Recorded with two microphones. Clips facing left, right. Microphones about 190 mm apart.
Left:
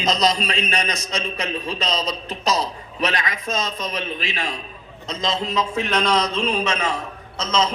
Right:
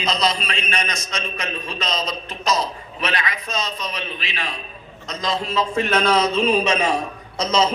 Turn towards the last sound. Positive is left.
turn(degrees=-10)  # may be behind; listen again after turning